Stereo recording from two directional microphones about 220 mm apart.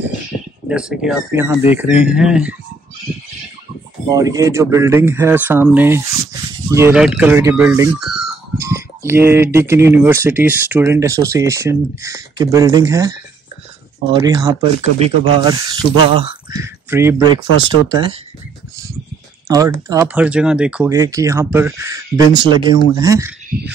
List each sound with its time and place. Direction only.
0.7 s speech: 5° right (ahead or behind)
4.1 s speech: 15° right (ahead or behind)
14.1 s speech: 20° right (ahead or behind)
16.5 s speech: 10° right (ahead or behind)
19.4 s speech: 15° right (ahead or behind)